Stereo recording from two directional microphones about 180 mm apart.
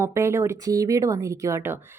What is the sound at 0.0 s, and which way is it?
Speech, 15° right (ahead or behind).